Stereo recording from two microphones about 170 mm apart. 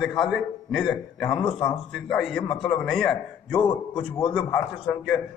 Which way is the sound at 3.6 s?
25° left (ahead or behind).